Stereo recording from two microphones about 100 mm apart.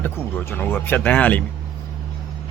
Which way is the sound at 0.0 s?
20° left (ahead or behind).